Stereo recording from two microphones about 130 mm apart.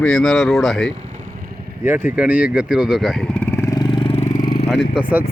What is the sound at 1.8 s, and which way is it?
Speech, 15° right (ahead or behind).